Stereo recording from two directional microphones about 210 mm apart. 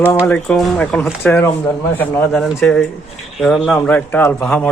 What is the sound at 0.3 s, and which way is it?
A man's voice, 5° left (ahead or behind).